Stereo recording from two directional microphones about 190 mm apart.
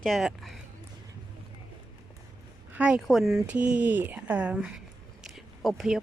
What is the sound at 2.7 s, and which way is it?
Speech, 5° right (ahead or behind).